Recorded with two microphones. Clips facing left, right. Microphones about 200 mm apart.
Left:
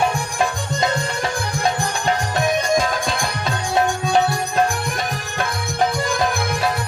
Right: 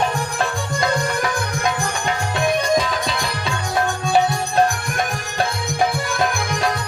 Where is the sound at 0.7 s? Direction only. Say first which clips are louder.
Right 1 dB; 25° left (ahead or behind); by 3.5 s 50° left (ahead or behind).